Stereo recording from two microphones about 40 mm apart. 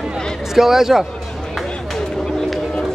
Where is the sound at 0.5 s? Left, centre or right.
Centre.